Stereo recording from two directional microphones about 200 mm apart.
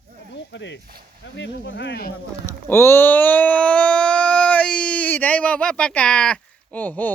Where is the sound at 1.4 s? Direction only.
65° left (ahead or behind).